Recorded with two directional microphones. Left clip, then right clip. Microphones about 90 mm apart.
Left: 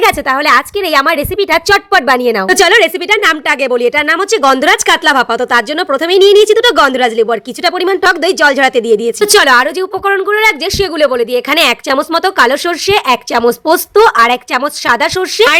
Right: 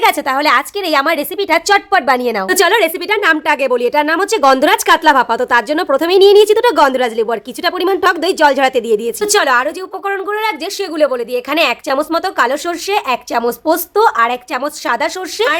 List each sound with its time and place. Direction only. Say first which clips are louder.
0.0 s a woman's voice: left 2 dB; 25° left (ahead or behind)
2.5 s speech: left 4 dB; 20° left (ahead or behind)
9.2 s a woman's voice: left 6 dB; 40° left (ahead or behind)